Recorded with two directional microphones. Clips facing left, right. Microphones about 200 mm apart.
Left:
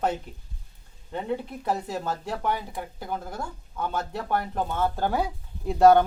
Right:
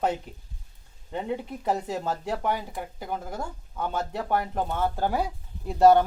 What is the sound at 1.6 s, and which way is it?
A man's voice, 15° right (ahead or behind).